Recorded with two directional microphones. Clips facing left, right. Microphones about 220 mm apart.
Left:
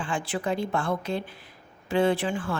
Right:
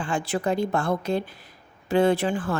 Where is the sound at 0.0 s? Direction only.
40° right (ahead or behind).